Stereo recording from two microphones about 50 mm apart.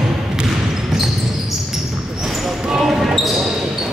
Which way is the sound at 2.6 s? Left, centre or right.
Centre.